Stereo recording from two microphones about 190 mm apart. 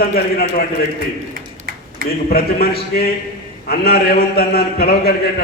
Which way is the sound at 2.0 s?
55° left (ahead or behind).